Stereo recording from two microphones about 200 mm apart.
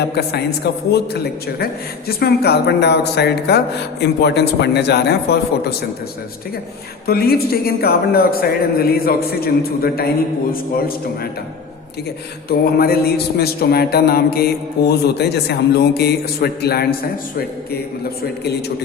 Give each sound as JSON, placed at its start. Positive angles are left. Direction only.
{"t": 0.0, "sound": "a man's voice", "side_deg": 55}
{"t": 7.1, "sound": "a man's voice", "side_deg": 50}
{"t": 12.5, "sound": "a man's voice", "side_deg": 50}